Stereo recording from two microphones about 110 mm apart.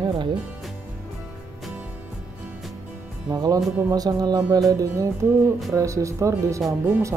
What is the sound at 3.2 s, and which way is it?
Speech, 35° right (ahead or behind).